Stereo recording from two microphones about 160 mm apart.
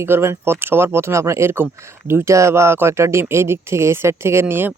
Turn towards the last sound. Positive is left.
turn(degrees=-15)  # may be behind; listen again after turning